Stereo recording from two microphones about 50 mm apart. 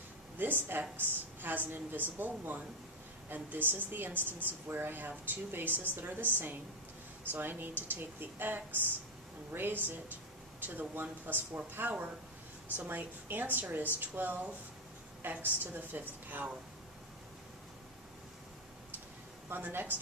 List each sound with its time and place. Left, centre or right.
0.4 s a woman's voice: right
19.5 s a woman's voice: right